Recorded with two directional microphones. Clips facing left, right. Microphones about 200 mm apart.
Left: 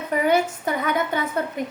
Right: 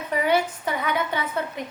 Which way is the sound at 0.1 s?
45° left (ahead or behind).